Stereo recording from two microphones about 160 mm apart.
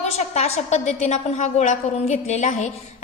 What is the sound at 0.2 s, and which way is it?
A woman's voice, 45° left (ahead or behind).